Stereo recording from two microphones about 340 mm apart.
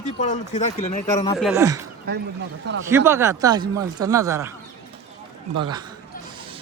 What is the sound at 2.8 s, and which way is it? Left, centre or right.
Speech, centre.